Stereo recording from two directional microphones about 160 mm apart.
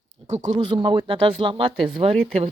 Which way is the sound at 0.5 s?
30° right (ahead or behind).